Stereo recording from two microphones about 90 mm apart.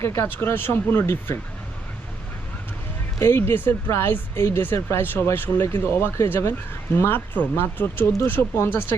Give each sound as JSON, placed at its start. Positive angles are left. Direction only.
{"t": 0.0, "sound": "speech", "side_deg": 30}
{"t": 3.2, "sound": "speech", "side_deg": 30}